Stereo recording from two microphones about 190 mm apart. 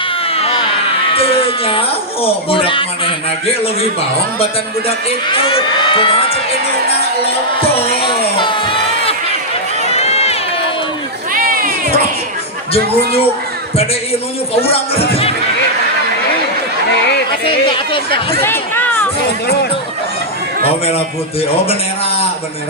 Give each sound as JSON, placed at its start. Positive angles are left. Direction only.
{"t": 0.3, "sound": "baby cry", "side_deg": 30}
{"t": 1.1, "sound": "speech", "side_deg": 30}
{"t": 4.9, "sound": "speech", "side_deg": 30}
{"t": 8.0, "sound": "a sound", "side_deg": 25}
{"t": 9.9, "sound": "run", "side_deg": 35}
{"t": 11.3, "sound": "cat", "side_deg": -50}
{"t": 12.7, "sound": "speech", "side_deg": 30}
{"t": 14.6, "sound": "speech", "side_deg": 30}
{"t": 17.4, "sound": "speech", "side_deg": 25}
{"t": 18.4, "sound": "chatter", "side_deg": 10}